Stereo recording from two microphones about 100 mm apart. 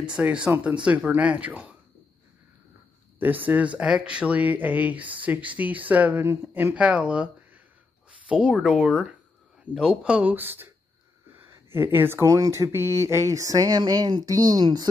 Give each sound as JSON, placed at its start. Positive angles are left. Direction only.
{"t": 0.0, "sound": "speech", "side_deg": -10}
{"t": 3.2, "sound": "speech", "side_deg": -20}
{"t": 8.3, "sound": "speech", "side_deg": -10}
{"t": 11.7, "sound": "speech", "side_deg": -25}
{"t": 12.3, "sound": "a sound", "side_deg": -30}